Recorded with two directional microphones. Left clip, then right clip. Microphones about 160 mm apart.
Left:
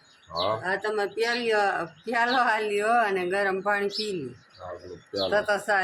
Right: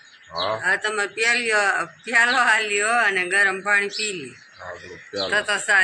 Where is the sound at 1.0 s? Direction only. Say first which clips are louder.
Right 5 dB; 25° left (ahead or behind); by 4.1 s 50° left (ahead or behind).